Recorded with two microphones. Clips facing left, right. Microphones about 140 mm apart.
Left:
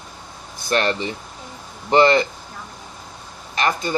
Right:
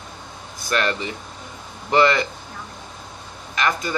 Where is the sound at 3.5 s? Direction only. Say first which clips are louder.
Left 1 dB; 30° left (ahead or behind).